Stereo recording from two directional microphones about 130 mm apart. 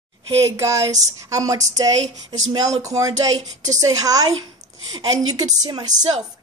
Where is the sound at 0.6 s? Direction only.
25° right (ahead or behind).